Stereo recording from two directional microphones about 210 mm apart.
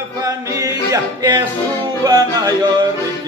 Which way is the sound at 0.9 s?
20° right (ahead or behind).